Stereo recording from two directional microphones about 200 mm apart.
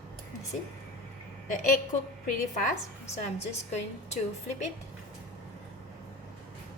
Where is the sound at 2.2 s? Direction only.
40° left (ahead or behind).